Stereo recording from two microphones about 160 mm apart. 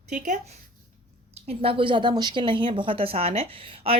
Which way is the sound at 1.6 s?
35° right (ahead or behind).